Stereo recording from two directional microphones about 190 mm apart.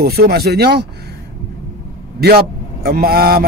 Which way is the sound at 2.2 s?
55° right (ahead or behind).